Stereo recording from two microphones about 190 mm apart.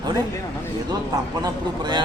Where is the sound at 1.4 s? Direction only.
25° right (ahead or behind).